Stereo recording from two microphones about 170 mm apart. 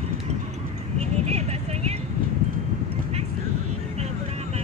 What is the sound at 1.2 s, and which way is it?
Vehicle, 40° right (ahead or behind).